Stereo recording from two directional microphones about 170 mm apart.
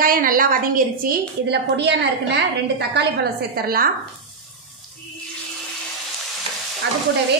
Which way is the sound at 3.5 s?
60° right (ahead or behind).